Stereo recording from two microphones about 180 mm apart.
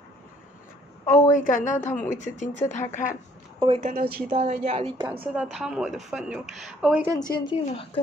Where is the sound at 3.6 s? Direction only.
30° right (ahead or behind).